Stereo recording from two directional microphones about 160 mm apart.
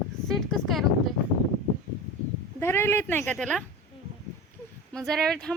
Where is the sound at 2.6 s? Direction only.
15° left (ahead or behind).